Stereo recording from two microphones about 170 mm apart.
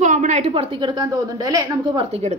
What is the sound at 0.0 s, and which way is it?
A woman's voice, 45° right (ahead or behind).